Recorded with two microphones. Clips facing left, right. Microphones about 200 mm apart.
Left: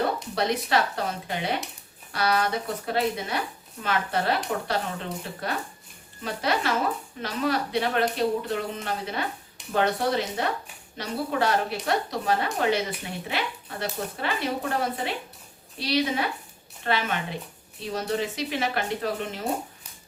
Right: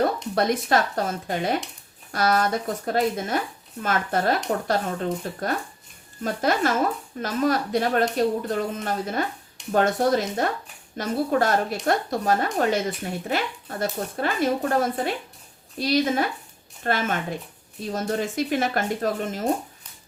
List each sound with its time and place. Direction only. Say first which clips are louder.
0.3 s a woman's voice: right 3 dB; 50° right (ahead or behind)